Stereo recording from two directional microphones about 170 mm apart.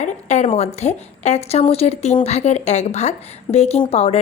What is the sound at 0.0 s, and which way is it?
A woman's voice, 45° left (ahead or behind).